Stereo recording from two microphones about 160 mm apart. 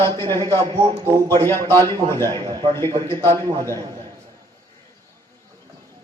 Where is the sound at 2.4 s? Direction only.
25° right (ahead or behind).